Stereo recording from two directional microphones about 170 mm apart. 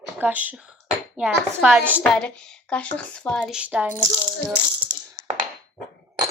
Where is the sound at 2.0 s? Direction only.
5° left (ahead or behind).